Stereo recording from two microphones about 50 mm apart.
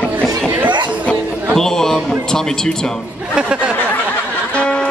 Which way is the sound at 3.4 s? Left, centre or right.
Centre.